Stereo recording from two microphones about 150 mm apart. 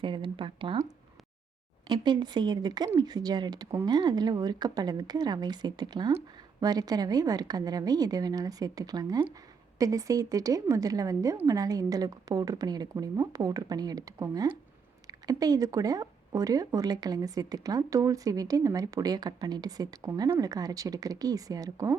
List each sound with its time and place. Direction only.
0.0 s speech: 35° right (ahead or behind)
1.9 s speech: 30° right (ahead or behind)